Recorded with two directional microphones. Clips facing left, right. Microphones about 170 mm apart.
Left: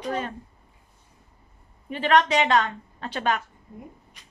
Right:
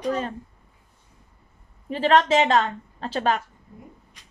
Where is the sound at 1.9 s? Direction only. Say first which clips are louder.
Right 2 dB; 35° right (ahead or behind).